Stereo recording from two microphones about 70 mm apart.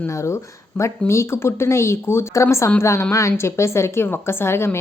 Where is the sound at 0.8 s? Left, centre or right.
Left.